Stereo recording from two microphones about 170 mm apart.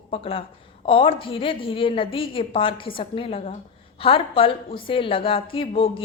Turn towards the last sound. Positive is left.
turn(degrees=30)  # may be behind; listen again after turning